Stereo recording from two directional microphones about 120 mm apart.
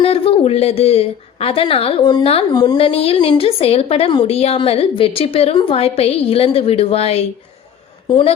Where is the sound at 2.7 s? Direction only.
55° left (ahead or behind).